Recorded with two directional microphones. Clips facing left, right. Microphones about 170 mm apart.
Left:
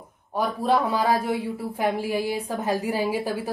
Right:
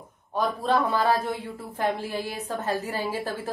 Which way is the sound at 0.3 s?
10° left (ahead or behind).